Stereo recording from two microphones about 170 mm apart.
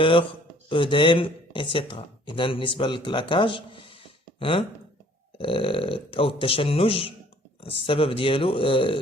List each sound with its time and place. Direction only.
0.0 s speech: 30° left (ahead or behind)